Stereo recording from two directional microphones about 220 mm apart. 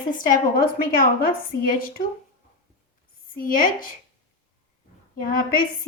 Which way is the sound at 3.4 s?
40° left (ahead or behind).